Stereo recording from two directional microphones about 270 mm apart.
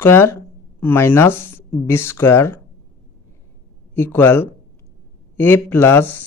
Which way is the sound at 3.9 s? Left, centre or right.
Centre.